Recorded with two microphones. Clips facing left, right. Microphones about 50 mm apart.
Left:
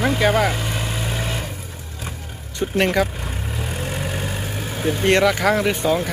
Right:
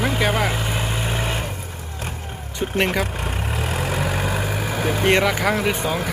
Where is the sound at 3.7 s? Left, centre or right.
Right.